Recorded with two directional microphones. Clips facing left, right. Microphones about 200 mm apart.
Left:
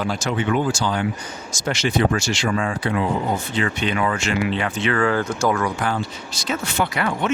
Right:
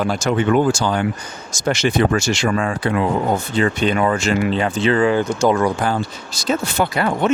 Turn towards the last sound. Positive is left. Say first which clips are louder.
# right 4 dB
turn(degrees=-35)  # may be behind; listen again after turning